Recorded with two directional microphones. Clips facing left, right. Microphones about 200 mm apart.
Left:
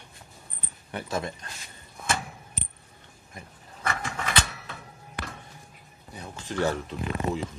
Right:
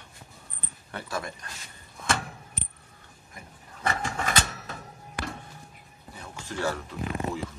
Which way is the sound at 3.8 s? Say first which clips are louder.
Right 2 dB; 35° right (ahead or behind).